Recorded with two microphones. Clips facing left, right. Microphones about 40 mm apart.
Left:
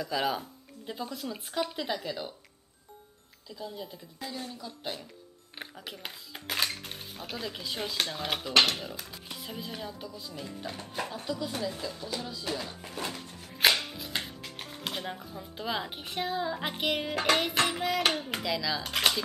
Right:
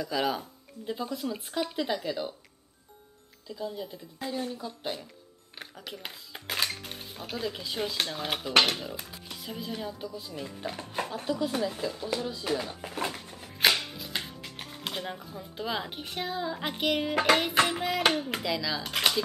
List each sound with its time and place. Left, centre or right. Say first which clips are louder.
0.0 s speech: right 1 dB; centre
3.4 s speech: right 4 dB; centre
4.2 s speech: right 5 dB; centre
4.6 s speech: right 3 dB; centre
10.2 s speech: right 2 dB; centre
13.5 s music: even; centre
13.9 s speech: even; centre
17.1 s speech: right 4 dB; right
17.6 s speech: right 3 dB; centre
18.3 s speech: right 1 dB; centre